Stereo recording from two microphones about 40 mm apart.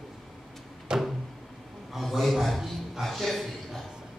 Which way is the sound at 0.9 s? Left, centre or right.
Right.